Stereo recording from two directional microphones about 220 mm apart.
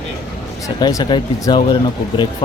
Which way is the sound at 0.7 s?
20° left (ahead or behind).